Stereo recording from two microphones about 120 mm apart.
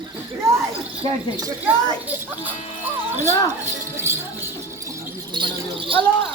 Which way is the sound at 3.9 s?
20° right (ahead or behind).